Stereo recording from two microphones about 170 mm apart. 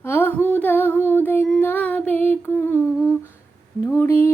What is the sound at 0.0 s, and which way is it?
Humming, 15° left (ahead or behind).